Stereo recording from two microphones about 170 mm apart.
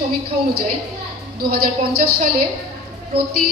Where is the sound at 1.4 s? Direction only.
60° right (ahead or behind).